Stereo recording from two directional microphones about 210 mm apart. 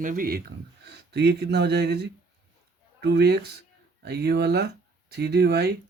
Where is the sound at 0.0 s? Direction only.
40° right (ahead or behind).